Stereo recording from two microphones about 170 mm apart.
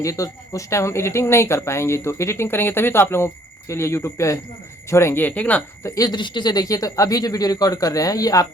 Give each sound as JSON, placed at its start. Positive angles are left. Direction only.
{"t": 0.0, "sound": "speech", "side_deg": 20}